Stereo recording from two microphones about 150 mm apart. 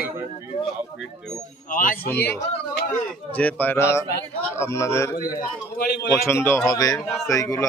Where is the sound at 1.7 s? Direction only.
65° left (ahead or behind).